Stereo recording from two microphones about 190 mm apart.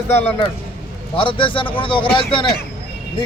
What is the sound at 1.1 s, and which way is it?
Speech, 25° left (ahead or behind).